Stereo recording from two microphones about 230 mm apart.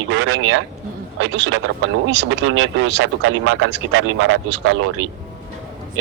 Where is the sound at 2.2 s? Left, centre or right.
Right.